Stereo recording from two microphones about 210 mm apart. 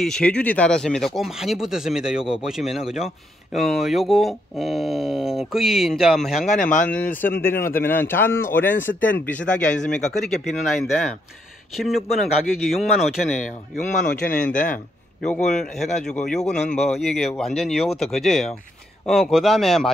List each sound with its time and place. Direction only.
0.0 s speech: 5° left (ahead or behind)
6.6 s speech: 35° left (ahead or behind)
7.2 s a man's voice: 10° left (ahead or behind)
13.8 s speech: 40° left (ahead or behind)
14.5 s speech: 5° left (ahead or behind)
16.3 s speech: 35° left (ahead or behind)
17.0 s speech: centre (ahead or behind)